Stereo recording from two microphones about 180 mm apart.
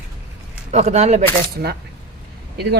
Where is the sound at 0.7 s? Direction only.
40° right (ahead or behind).